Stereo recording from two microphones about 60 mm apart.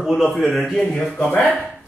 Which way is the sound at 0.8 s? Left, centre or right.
Centre.